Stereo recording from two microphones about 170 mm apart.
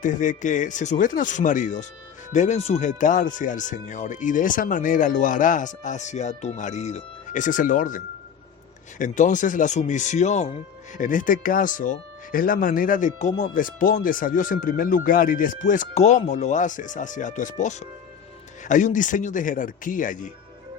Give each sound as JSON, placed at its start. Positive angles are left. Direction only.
{"t": 0.0, "sound": "speech", "side_deg": 50}